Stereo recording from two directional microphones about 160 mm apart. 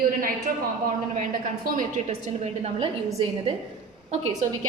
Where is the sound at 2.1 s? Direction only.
40° right (ahead or behind).